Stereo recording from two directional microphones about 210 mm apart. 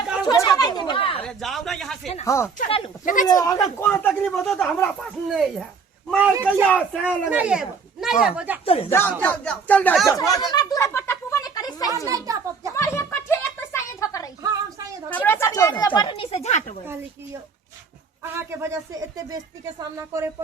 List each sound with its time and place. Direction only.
0.3 s chatter: 15° left (ahead or behind)
1.2 s speech: centre (ahead or behind)
2.2 s speech: 15° left (ahead or behind)
2.6 s speech: 25° left (ahead or behind)
3.2 s speech: 15° left (ahead or behind)
7.3 s speech: 5° right (ahead or behind)
8.6 s speech: 25° left (ahead or behind)
8.9 s speech: 10° left (ahead or behind)
10.2 s speech: 15° left (ahead or behind)
10.5 s a sound: 15° left (ahead or behind)
12.0 s speech: 15° right (ahead or behind)
12.7 s a sound: 15° left (ahead or behind)
15.1 s speech: 10° left (ahead or behind); by 16.7 s 35° left (ahead or behind)
18.2 s speech: 10° right (ahead or behind)